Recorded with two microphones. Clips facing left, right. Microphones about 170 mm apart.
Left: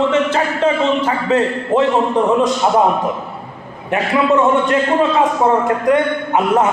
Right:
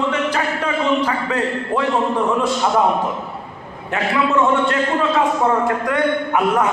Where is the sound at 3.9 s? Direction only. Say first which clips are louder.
Left 4 dB; 20° left (ahead or behind).